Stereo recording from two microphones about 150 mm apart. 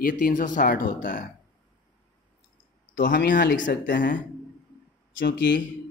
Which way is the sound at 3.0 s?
65° left (ahead or behind).